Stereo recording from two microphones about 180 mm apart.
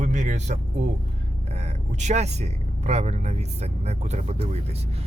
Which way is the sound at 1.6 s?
40° right (ahead or behind).